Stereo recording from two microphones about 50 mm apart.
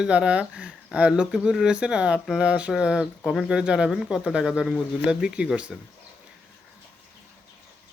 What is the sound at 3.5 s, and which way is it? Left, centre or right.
Speech, centre.